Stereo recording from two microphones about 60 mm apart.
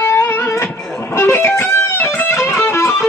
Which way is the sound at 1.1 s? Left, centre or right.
Left.